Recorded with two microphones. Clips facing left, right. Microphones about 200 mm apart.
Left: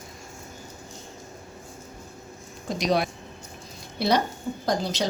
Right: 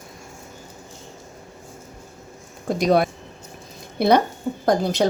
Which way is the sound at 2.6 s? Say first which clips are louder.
Right 6 dB; 50° right (ahead or behind).